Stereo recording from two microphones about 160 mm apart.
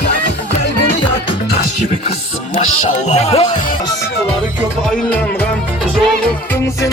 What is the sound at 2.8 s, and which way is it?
Speech, 45° left (ahead or behind).